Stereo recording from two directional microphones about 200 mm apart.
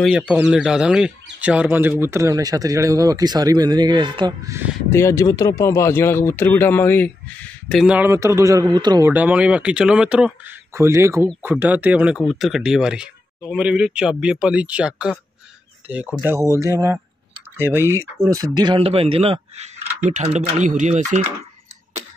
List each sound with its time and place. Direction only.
0.0 s speech: 5° right (ahead or behind)
4.9 s speech: 15° left (ahead or behind)
7.9 s speech: 10° right (ahead or behind)
9.1 s speech: 5° right (ahead or behind); by 21.2 s 35° right (ahead or behind)